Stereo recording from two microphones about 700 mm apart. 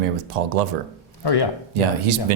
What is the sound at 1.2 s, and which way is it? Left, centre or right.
Speech, left.